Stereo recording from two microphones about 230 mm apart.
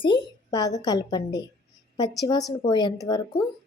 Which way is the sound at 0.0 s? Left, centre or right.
Centre.